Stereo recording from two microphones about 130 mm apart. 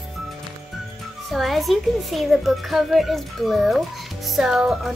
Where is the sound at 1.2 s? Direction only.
Centre (ahead or behind).